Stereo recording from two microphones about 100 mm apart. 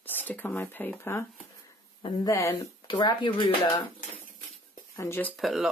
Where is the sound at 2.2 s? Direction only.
30° left (ahead or behind).